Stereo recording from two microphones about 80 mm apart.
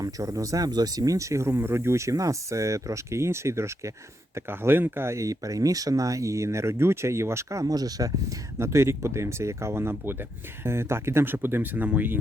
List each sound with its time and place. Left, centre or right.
0.0 s speech: right
8.5 s speech: right